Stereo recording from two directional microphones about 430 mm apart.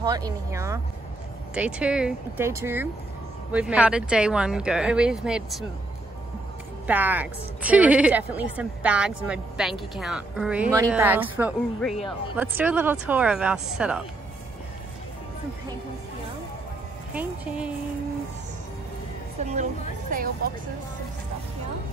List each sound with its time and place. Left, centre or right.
0.0 s a woman's voice: centre
6.9 s a woman's voice: centre
17.1 s speech: centre
19.4 s speech: centre